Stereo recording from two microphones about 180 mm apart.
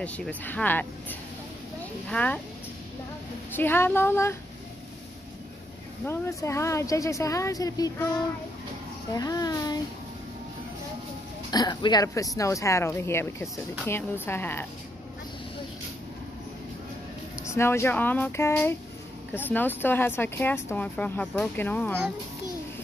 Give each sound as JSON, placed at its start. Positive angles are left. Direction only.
{"t": 0.0, "sound": "speech", "side_deg": 10}
{"t": 3.5, "sound": "speech", "side_deg": 10}
{"t": 6.0, "sound": "speech", "side_deg": 15}
{"t": 9.1, "sound": "a child's voice", "side_deg": 20}
{"t": 11.5, "sound": "speech", "side_deg": 20}
{"t": 17.5, "sound": "speech", "side_deg": 15}